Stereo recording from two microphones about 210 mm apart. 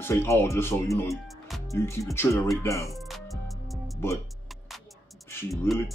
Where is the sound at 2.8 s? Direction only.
Centre (ahead or behind).